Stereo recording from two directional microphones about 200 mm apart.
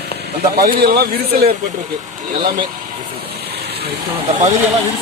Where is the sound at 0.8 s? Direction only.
50° right (ahead or behind).